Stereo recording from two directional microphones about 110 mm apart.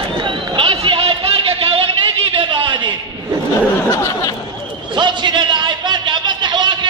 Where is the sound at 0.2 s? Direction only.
50° right (ahead or behind).